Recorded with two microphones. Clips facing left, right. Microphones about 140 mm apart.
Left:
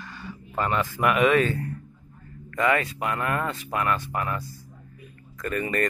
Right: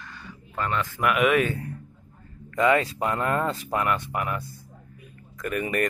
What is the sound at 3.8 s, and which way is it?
Speech, 20° right (ahead or behind).